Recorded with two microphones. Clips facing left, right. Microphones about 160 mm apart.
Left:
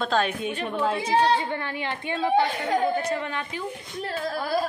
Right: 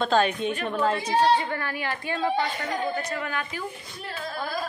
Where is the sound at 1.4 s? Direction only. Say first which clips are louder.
Even; 20° left (ahead or behind).